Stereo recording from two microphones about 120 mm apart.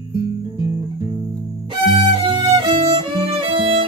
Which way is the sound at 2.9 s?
50° right (ahead or behind).